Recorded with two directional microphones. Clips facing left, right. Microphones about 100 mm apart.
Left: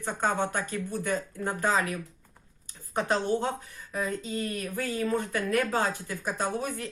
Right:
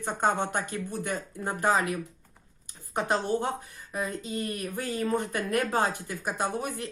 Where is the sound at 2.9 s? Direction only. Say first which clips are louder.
Even; 15° right (ahead or behind).